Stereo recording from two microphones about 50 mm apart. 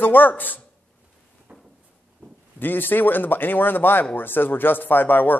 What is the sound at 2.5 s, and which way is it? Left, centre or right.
Speech, left.